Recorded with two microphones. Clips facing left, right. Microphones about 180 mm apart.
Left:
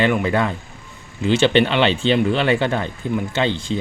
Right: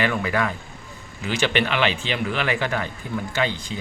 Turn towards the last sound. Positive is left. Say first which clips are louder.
# left 4 dB
turn(degrees=25)  # may be behind; listen again after turning